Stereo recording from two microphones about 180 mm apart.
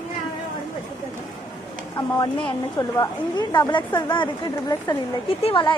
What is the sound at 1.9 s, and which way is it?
A woman's voice, 20° left (ahead or behind).